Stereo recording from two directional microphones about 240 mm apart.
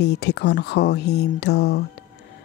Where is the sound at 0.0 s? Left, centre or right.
Left.